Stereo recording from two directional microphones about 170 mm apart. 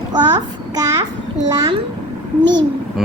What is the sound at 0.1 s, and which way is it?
Child singing, 25° right (ahead or behind).